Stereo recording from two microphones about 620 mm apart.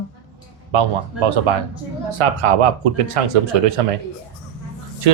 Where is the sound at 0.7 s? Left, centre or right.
Right.